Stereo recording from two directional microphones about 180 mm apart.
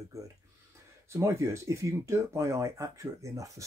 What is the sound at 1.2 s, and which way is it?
Speech, 15° right (ahead or behind).